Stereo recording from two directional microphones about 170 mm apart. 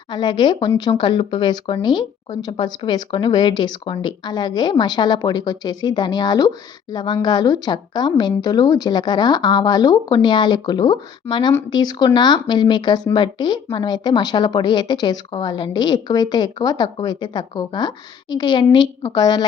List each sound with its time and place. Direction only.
0.1 s speech: 25° left (ahead or behind)